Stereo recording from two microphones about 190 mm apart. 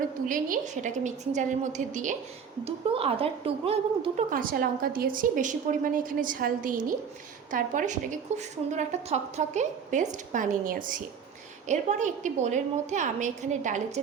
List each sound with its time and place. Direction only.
0.3 s a woman's voice: 45° right (ahead or behind)
2.6 s a woman's voice: 30° right (ahead or behind)
4.3 s a woman's voice: 50° right (ahead or behind)